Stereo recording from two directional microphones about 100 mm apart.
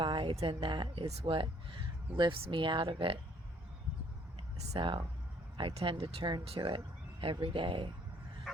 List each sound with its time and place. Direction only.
0.0 s a sound: 55° right (ahead or behind)
0.4 s speech: 55° right (ahead or behind)
4.8 s speech: 55° right (ahead or behind)